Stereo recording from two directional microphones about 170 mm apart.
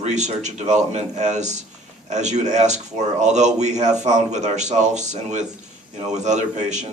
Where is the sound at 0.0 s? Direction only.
45° right (ahead or behind).